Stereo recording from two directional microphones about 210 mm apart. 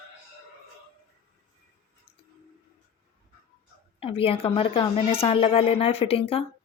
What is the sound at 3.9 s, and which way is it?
A woman's voice, 25° left (ahead or behind).